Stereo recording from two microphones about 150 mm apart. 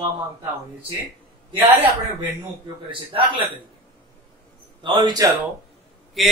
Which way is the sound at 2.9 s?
35° right (ahead or behind).